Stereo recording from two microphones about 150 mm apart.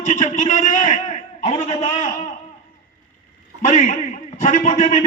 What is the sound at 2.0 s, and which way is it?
Speech, 55° left (ahead or behind).